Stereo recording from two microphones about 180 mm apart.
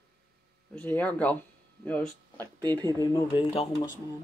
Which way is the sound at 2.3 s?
25° right (ahead or behind).